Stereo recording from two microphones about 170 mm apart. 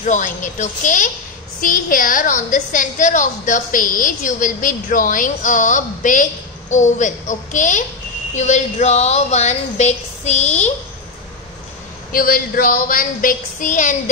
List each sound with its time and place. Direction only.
0.0 s a woman's voice: 50° left (ahead or behind)
12.1 s a woman's voice: 55° left (ahead or behind)